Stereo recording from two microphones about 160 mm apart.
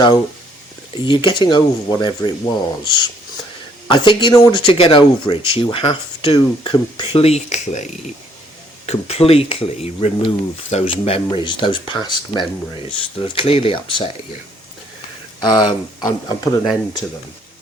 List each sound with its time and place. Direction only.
1.0 s speech: 30° left (ahead or behind); by 7.9 s 45° left (ahead or behind)
8.9 s speech: 40° left (ahead or behind)
15.4 s speech: 25° left (ahead or behind)